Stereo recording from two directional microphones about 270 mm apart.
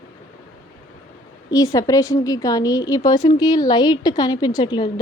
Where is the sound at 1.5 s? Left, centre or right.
Centre.